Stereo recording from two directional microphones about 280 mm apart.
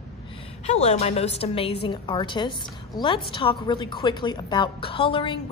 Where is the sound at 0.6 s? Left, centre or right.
Left.